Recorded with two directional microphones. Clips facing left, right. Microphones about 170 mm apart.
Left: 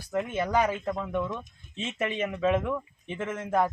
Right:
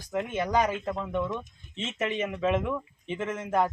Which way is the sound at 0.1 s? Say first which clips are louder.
Even; 10° right (ahead or behind).